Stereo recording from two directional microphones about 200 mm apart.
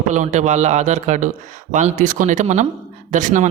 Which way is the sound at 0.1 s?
35° right (ahead or behind).